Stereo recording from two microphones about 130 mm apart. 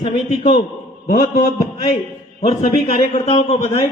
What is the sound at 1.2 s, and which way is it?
A man's voice, 65° left (ahead or behind).